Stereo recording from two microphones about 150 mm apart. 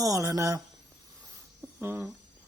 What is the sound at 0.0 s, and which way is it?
Speech, 20° right (ahead or behind).